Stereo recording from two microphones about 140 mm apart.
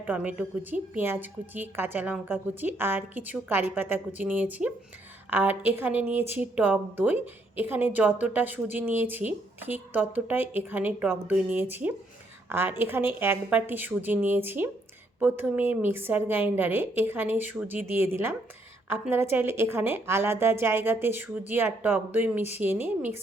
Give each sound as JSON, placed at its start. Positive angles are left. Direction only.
{"t": 0.0, "sound": "a woman's voice", "side_deg": -10}